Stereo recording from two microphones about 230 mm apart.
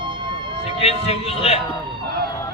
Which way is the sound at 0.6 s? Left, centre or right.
Left.